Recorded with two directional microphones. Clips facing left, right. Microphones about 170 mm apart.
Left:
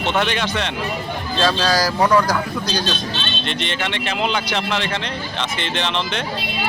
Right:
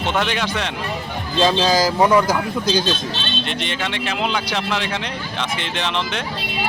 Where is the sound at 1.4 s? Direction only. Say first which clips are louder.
Right 2 dB; 20° right (ahead or behind).